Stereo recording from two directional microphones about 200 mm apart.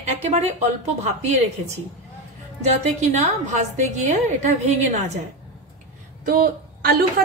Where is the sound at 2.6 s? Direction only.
35° right (ahead or behind).